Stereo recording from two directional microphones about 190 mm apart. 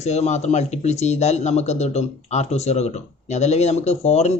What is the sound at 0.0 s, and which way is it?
Speech, 35° left (ahead or behind).